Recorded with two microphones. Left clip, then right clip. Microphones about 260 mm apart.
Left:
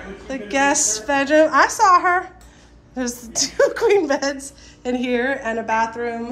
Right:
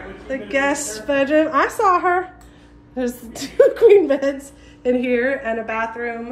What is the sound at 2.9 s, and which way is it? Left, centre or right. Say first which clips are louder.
A woman's voice: left 1 dB; centre.